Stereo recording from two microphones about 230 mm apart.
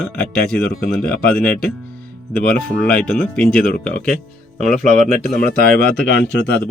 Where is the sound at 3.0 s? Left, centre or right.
Left.